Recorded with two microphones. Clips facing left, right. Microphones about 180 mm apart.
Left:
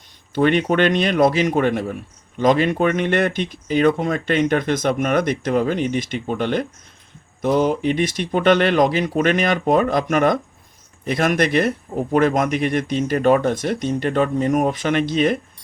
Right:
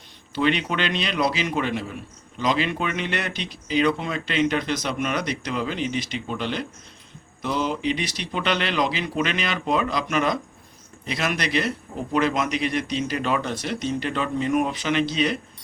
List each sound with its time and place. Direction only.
0.3 s speech: 50° left (ahead or behind)